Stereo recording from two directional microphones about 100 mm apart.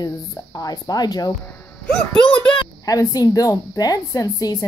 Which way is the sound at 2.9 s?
40° left (ahead or behind).